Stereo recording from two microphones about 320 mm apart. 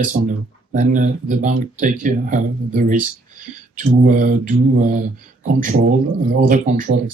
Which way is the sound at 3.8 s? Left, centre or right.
Right.